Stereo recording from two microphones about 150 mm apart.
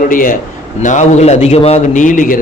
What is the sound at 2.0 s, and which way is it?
Speech, 60° left (ahead or behind).